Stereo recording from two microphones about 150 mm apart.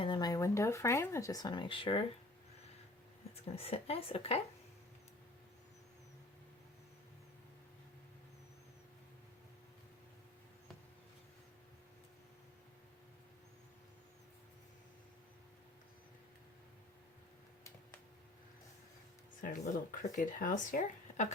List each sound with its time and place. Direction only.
0.0 s speech: 30° left (ahead or behind)
3.5 s a woman's voice: 40° left (ahead or behind)
19.4 s speech: 65° left (ahead or behind)